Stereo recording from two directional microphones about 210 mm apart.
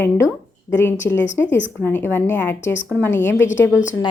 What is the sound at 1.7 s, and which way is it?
A woman's voice, 10° left (ahead or behind).